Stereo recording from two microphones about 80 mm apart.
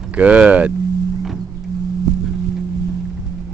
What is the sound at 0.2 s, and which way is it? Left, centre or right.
Speech, centre.